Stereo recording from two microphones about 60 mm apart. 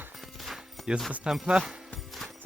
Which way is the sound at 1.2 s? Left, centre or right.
Centre.